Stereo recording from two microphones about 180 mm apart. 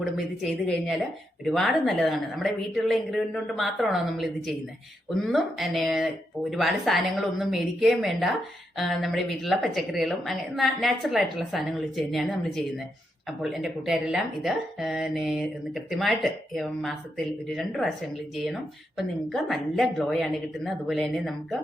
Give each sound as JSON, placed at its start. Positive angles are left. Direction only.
{"t": 0.0, "sound": "speech", "side_deg": 0}
{"t": 18.9, "sound": "speech", "side_deg": 0}